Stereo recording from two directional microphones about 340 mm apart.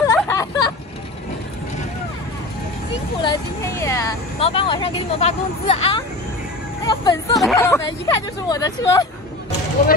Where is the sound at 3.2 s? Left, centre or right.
Centre.